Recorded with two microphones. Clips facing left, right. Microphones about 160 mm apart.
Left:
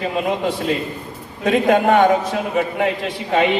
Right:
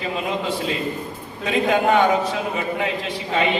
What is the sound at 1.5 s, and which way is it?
A man's voice, 55° left (ahead or behind).